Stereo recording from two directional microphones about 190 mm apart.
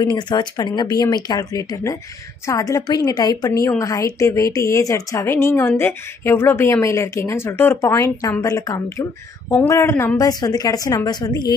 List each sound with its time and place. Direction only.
0.0 s a woman's voice: 20° left (ahead or behind)